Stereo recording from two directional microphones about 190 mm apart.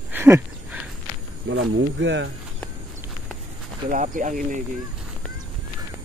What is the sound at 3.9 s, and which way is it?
Speech, 40° right (ahead or behind).